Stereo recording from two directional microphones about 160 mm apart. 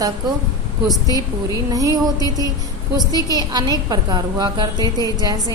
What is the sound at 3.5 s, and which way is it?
A woman's voice, 25° right (ahead or behind).